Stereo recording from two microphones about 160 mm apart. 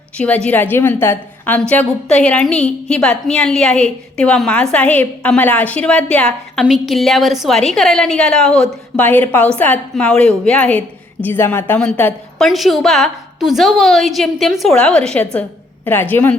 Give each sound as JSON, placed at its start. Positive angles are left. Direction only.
{"t": 0.2, "sound": "a woman's voice", "side_deg": 5}